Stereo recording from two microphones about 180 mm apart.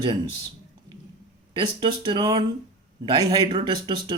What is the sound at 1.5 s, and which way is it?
Speech, 25° right (ahead or behind).